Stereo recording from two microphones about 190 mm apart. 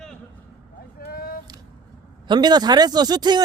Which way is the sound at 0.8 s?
55° left (ahead or behind).